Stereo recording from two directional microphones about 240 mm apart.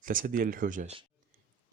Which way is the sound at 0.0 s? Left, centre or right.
Right.